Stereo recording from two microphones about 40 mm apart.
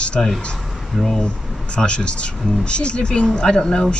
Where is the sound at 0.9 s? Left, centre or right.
Centre.